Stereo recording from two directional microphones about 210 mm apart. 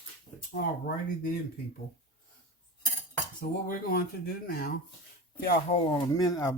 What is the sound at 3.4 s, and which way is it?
Speech, 45° left (ahead or behind).